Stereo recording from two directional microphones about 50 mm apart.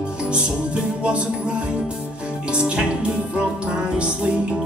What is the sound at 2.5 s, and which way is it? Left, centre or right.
Music, right.